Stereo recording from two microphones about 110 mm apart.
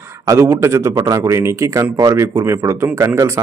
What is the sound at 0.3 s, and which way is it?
A man's voice, 25° right (ahead or behind).